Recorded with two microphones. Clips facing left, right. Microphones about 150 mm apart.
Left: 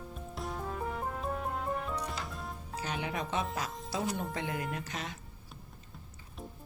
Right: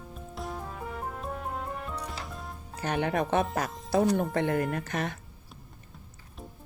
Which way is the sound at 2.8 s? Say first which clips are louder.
Right 8 dB; 55° right (ahead or behind).